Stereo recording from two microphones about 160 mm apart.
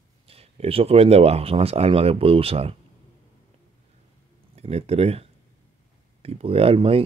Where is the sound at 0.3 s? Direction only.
40° right (ahead or behind).